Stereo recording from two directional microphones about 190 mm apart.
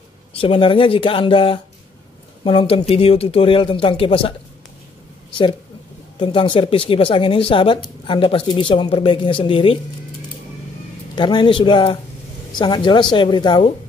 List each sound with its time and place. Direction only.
0.3 s speech: 30° left (ahead or behind)
5.3 s speech: 25° left (ahead or behind)
11.1 s speech: 25° left (ahead or behind)